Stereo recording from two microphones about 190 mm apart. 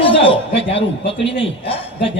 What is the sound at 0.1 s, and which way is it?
Speech, 30° left (ahead or behind).